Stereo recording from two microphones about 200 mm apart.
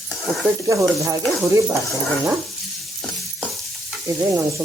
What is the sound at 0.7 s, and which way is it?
Speech, 15° right (ahead or behind).